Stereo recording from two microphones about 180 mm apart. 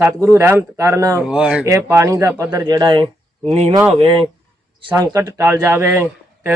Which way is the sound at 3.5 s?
35° right (ahead or behind).